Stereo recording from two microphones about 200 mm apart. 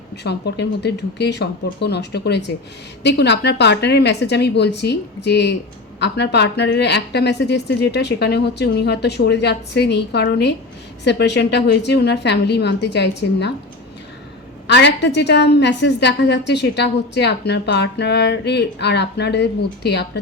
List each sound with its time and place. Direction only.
0.2 s a woman's voice: 55° left (ahead or behind)
14.7 s a woman's voice: 60° left (ahead or behind)